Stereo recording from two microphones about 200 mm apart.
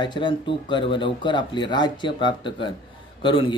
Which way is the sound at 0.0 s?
25° left (ahead or behind).